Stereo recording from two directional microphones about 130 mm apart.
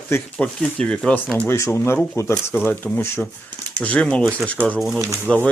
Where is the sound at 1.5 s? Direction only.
20° left (ahead or behind).